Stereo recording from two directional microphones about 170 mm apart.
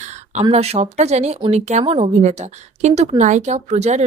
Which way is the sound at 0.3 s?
40° right (ahead or behind).